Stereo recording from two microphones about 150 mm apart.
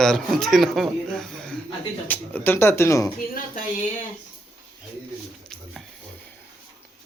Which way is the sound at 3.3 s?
60° left (ahead or behind).